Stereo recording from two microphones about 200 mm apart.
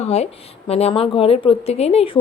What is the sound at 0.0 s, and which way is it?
A woman's voice, 30° left (ahead or behind).